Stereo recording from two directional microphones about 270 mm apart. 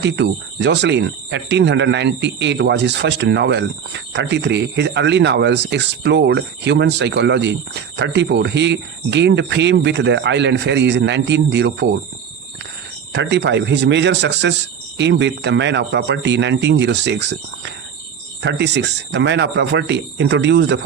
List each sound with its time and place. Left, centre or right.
0.0 s speech: right
13.1 s speech: right